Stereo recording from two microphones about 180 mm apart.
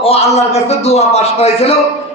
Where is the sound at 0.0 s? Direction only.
35° left (ahead or behind).